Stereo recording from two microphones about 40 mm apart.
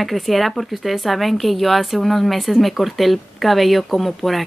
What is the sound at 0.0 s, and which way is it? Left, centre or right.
Speech, centre.